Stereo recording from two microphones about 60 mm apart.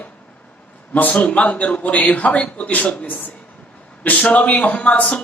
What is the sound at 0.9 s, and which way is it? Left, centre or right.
A man's voice, left.